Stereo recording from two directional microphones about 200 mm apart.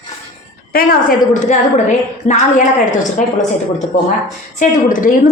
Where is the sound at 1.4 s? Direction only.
35° left (ahead or behind).